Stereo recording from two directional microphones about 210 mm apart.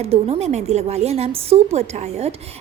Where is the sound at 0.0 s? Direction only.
30° right (ahead or behind).